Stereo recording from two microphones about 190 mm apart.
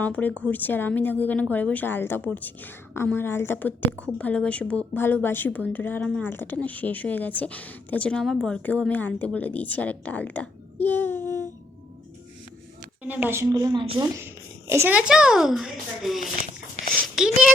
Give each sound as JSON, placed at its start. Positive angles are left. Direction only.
{"t": 0.0, "sound": "a woman's voice", "side_deg": 10}
{"t": 10.8, "sound": "child singing", "side_deg": 10}
{"t": 13.2, "sound": "a woman's voice", "side_deg": -15}
{"t": 14.7, "sound": "a child's voice", "side_deg": -10}
{"t": 16.9, "sound": "a sound", "side_deg": 5}